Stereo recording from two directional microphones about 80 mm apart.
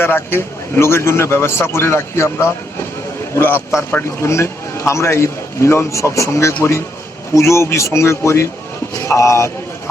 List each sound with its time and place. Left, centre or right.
0.0 s a man's voice: left
4.2 s a man's voice: left